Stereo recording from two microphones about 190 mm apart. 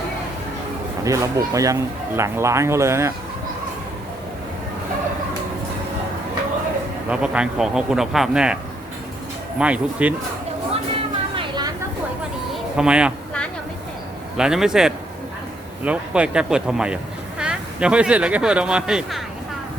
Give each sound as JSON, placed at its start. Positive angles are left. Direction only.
{"t": 1.0, "sound": "speech", "side_deg": -15}
{"t": 7.1, "sound": "speech", "side_deg": -5}
{"t": 9.6, "sound": "speech", "side_deg": -5}
{"t": 11.3, "sound": "vehicle", "side_deg": -25}
{"t": 12.7, "sound": "speech", "side_deg": -5}
{"t": 14.3, "sound": "speech", "side_deg": -5}